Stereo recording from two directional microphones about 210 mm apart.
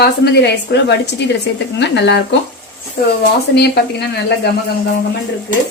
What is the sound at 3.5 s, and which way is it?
Speech, 50° left (ahead or behind).